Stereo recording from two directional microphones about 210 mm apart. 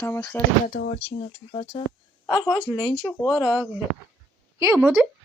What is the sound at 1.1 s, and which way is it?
Speech, 25° left (ahead or behind).